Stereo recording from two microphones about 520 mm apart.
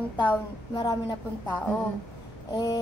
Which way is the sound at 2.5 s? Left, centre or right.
Centre.